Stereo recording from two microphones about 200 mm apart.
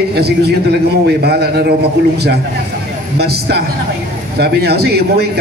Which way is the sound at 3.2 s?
55° right (ahead or behind).